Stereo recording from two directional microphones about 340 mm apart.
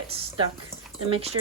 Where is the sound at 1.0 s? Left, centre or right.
Centre.